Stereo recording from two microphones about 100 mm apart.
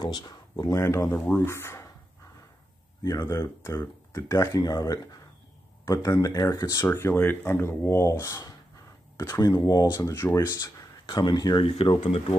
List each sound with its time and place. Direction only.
0.0 s speech: 45° left (ahead or behind)
0.7 s speech: 25° left (ahead or behind)
3.0 s speech: 30° left (ahead or behind)
9.6 s speech: 40° left (ahead or behind)
9.9 s speech: 30° left (ahead or behind)
10.5 s speech: 40° left (ahead or behind)
11.6 s speech: 70° left (ahead or behind)